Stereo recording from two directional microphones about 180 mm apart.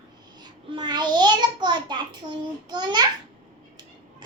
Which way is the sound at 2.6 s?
25° right (ahead or behind).